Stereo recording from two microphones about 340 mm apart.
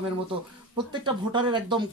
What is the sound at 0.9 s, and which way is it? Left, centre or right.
Speech, centre.